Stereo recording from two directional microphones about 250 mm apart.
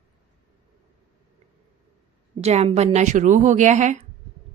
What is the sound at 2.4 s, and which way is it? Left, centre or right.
Speech, right.